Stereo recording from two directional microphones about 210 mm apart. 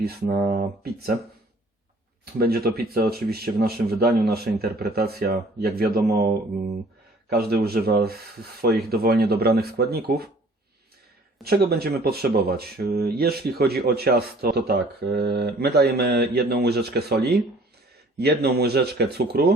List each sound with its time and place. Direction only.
0.0 s speech: 45° right (ahead or behind)
2.4 s speech: 45° right (ahead or behind)
7.3 s speech: 45° right (ahead or behind)
11.4 s speech: 50° right (ahead or behind)